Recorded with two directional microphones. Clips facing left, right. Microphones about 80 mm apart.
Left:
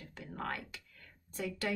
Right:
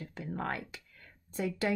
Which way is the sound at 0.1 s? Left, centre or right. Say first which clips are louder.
Right 3 dB; right.